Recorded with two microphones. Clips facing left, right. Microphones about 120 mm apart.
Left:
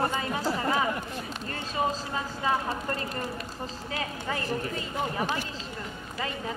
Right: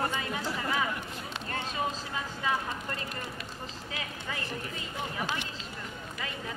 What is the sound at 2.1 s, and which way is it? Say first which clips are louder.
Speech: left 4 dB; 40° left (ahead or behind).